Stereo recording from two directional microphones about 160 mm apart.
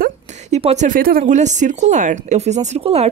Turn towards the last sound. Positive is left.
turn(degrees=-40)  # may be behind; listen again after turning